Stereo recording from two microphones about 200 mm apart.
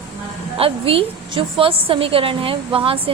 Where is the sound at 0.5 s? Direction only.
30° right (ahead or behind).